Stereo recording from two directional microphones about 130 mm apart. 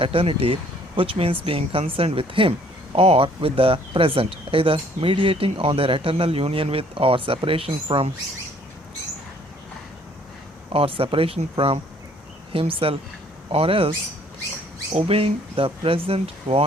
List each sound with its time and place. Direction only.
0.0 s speech: 45° right (ahead or behind)
10.7 s speech: 45° right (ahead or behind)
14.9 s speech: 50° right (ahead or behind)